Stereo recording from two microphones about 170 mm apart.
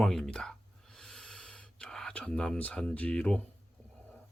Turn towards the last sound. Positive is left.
turn(degrees=5)  # may be behind; listen again after turning